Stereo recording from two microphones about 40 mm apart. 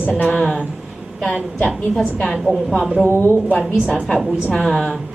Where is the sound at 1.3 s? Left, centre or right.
Left.